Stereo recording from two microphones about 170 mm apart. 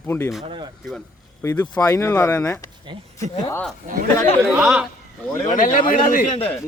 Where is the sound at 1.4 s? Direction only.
15° left (ahead or behind).